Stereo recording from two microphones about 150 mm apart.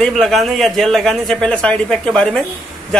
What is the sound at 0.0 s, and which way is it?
A man's voice, centre (ahead or behind).